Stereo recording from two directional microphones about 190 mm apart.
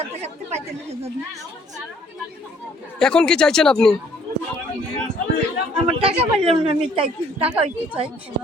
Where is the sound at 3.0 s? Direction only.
5° left (ahead or behind).